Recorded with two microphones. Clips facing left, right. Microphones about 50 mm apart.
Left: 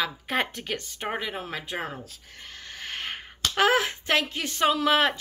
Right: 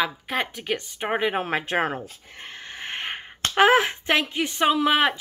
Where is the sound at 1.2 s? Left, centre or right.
Right.